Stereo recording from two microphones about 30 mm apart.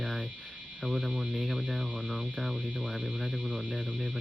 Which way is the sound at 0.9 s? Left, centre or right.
Left.